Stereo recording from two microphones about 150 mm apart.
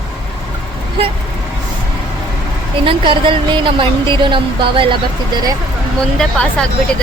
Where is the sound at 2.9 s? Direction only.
35° right (ahead or behind).